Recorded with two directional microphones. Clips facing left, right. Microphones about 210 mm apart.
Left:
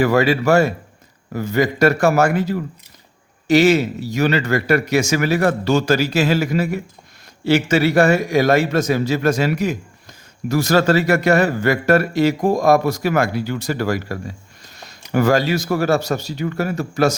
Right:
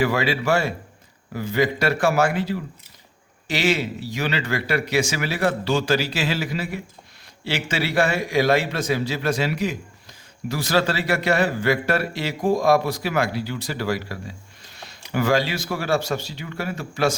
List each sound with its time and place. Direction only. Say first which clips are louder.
0.0 s a man's voice: left 6 dB; 45° left (ahead or behind)